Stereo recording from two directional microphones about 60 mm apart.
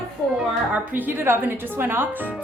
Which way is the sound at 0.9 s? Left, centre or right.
Right.